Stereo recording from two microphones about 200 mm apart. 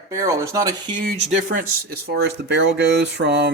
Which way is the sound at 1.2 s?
40° right (ahead or behind).